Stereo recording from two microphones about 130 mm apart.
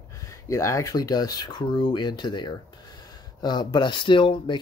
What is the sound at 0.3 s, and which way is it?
Speech, 25° left (ahead or behind).